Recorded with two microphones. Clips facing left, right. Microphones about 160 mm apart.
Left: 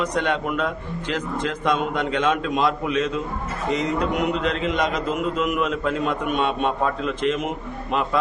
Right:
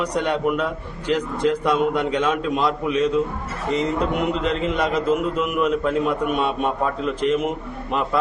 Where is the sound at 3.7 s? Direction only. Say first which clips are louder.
Right 1 dB; 30° right (ahead or behind).